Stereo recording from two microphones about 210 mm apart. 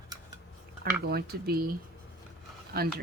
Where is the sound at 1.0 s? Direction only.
50° right (ahead or behind).